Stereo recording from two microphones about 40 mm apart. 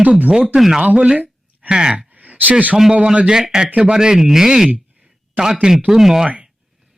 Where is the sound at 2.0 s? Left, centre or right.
Right.